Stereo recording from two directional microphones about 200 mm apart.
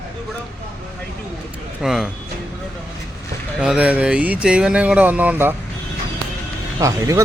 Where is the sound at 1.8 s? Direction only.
Centre (ahead or behind).